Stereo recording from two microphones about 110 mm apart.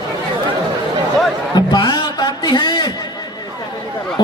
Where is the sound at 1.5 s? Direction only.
40° left (ahead or behind).